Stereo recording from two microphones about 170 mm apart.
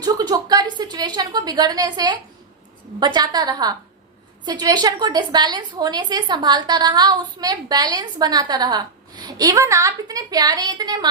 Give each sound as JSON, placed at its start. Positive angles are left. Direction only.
{"t": 0.0, "sound": "a woman's voice", "side_deg": -25}